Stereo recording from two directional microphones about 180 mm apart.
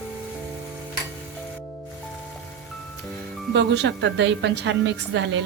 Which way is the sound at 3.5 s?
70° right (ahead or behind).